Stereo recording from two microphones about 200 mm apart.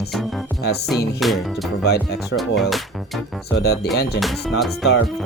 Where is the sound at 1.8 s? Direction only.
55° left (ahead or behind).